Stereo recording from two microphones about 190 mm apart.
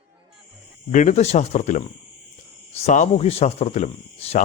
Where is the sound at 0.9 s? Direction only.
40° left (ahead or behind).